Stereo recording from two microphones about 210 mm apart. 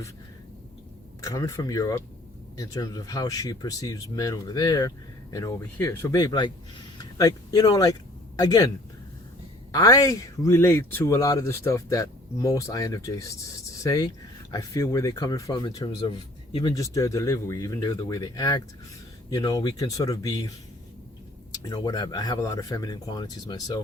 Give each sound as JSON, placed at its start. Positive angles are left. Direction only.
{"t": 1.2, "sound": "speech", "side_deg": 15}
{"t": 9.7, "sound": "speech", "side_deg": 15}
{"t": 21.5, "sound": "speech", "side_deg": 20}